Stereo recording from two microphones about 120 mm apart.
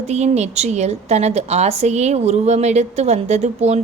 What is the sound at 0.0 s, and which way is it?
A woman's voice, 65° right (ahead or behind).